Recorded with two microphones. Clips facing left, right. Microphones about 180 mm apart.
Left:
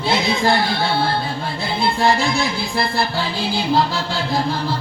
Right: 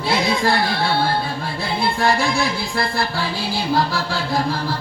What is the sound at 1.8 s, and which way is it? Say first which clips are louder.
Music: left 2 dB; 25° left (ahead or behind).